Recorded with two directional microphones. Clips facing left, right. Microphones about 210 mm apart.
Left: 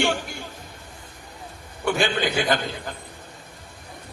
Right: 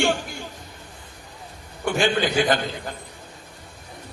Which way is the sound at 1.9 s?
45° right (ahead or behind).